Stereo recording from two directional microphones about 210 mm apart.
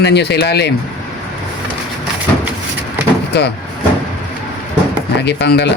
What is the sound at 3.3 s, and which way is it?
Speech, 50° left (ahead or behind).